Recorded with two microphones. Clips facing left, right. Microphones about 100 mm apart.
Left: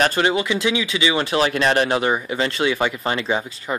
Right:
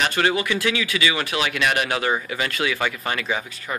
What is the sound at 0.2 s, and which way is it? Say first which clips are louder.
Speech: left 2 dB; 25° left (ahead or behind).